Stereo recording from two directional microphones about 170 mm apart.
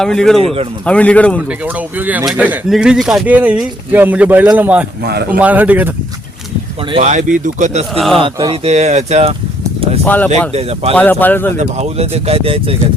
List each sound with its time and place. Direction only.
0.0 s speech: 5° left (ahead or behind)
0.4 s speech: 35° right (ahead or behind)
0.9 s speech: 5° left (ahead or behind)
1.5 s speech: 10° right (ahead or behind)
5.0 s speech: 70° right (ahead or behind)
5.4 s speech: 10° right (ahead or behind)
6.9 s speech: 45° right (ahead or behind)
7.9 s speech: centre (ahead or behind)
8.2 s speech: 25° right (ahead or behind)
8.6 s speech: 40° right (ahead or behind)
10.0 s speech: 10° left (ahead or behind)
10.5 s speech: 35° right (ahead or behind)
10.9 s speech: 10° left (ahead or behind)
11.5 s speech: 40° right (ahead or behind)